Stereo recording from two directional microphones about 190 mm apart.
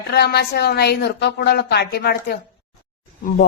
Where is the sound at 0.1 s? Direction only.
60° left (ahead or behind).